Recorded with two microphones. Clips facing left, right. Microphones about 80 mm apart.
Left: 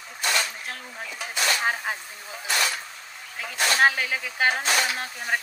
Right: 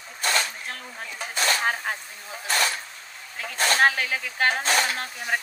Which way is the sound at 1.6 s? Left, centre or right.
Centre.